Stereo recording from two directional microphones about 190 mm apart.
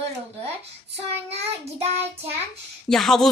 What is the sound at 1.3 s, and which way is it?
Child singing, 35° right (ahead or behind).